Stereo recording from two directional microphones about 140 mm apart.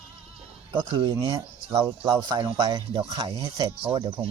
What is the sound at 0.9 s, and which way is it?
Speech, 35° right (ahead or behind).